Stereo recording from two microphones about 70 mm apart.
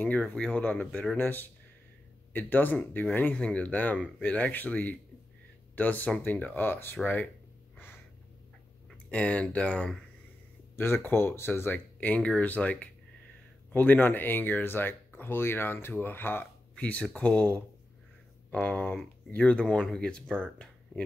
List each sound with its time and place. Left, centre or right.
0.3 s speech: left
9.1 s speech: centre
10.8 s speech: left
16.7 s speech: centre